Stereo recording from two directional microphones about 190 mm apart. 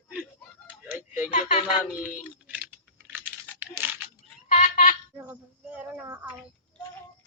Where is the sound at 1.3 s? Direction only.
40° left (ahead or behind).